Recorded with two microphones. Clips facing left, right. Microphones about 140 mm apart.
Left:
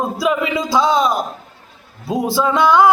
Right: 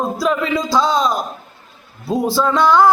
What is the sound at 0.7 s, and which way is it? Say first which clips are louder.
Speech: left 2 dB; 20° left (ahead or behind).